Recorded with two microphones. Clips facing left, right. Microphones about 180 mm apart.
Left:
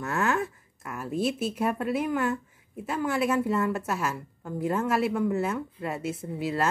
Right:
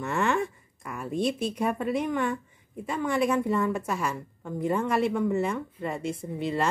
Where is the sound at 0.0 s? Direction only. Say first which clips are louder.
Right 1 dB; centre (ahead or behind).